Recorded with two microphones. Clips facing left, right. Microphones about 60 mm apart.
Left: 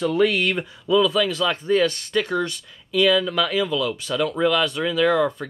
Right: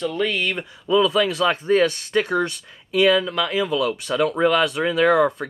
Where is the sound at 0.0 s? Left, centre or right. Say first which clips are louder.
Left 3 dB; centre.